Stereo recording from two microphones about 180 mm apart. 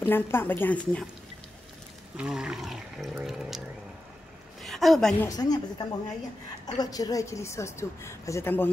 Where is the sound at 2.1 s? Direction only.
5° right (ahead or behind).